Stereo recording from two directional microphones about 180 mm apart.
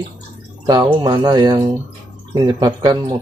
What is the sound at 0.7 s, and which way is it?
Speech, 20° right (ahead or behind).